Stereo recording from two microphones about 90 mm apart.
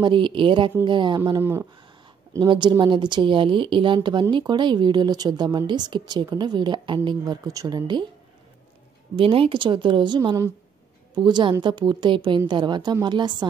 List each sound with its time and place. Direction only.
0.0 s a woman's voice: 65° right (ahead or behind)
1.4 s speech: 25° right (ahead or behind)
2.4 s a woman's voice: 60° right (ahead or behind)
7.4 s speech: 45° right (ahead or behind)
9.1 s a woman's voice: 90° right; by 13.5 s 55° right (ahead or behind)